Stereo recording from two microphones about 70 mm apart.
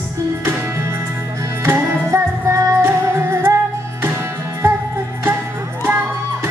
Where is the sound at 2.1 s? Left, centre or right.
Right.